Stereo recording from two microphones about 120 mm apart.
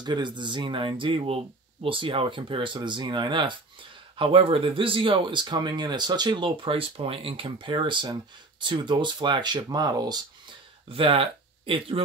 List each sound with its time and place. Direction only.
0.0 s speech: 40° right (ahead or behind)
10.9 s speech: 50° right (ahead or behind)